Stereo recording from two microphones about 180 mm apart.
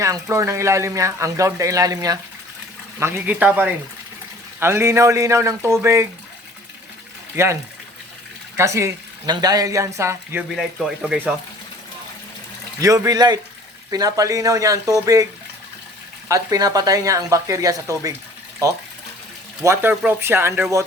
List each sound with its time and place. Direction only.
0.0 s speech: 15° right (ahead or behind)
7.3 s speech: 15° right (ahead or behind)
10.5 s speech: 5° right (ahead or behind)
12.8 s speech: 20° right (ahead or behind)
16.3 s speech: 20° right (ahead or behind)